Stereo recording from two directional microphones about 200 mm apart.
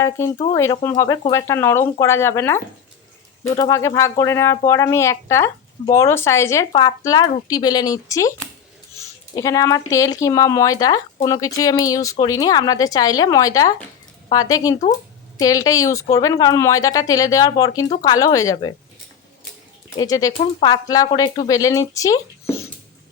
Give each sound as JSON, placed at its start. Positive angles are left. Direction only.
{"t": 0.5, "sound": "speech", "side_deg": 15}
{"t": 20.0, "sound": "speech", "side_deg": 20}